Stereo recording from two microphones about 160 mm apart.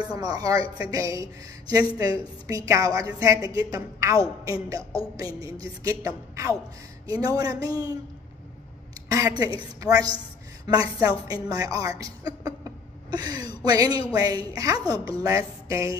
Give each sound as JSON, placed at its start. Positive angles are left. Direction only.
{"t": 0.1, "sound": "speech", "side_deg": -25}
{"t": 9.1, "sound": "speech", "side_deg": -20}